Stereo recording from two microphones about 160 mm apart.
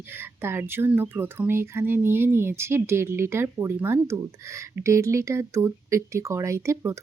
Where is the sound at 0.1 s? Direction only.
15° right (ahead or behind).